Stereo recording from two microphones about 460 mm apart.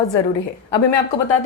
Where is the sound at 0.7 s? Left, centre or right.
Left.